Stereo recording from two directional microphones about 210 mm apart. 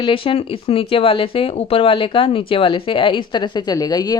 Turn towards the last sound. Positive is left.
turn(degrees=20)  # may be behind; listen again after turning